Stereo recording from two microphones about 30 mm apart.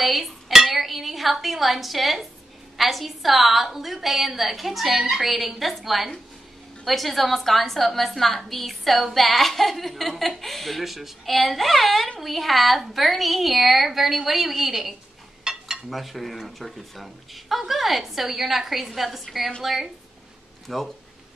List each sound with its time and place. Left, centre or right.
0.0 s dishes: centre
0.5 s a woman's voice: centre
15.5 s dishes: right
15.9 s a woman's voice: centre
20.6 s speech: centre